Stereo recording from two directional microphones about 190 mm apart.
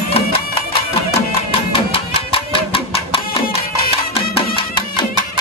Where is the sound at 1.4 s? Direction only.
30° left (ahead or behind).